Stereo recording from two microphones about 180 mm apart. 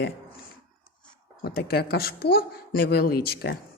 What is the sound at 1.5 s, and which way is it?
A woman's voice, 60° left (ahead or behind).